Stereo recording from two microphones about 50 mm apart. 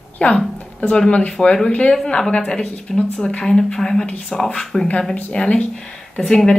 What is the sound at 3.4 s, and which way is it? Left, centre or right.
Speech, centre.